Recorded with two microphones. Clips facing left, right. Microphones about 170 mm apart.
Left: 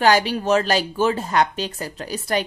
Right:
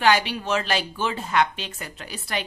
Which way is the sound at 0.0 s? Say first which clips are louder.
Left 4 dB; 40° left (ahead or behind).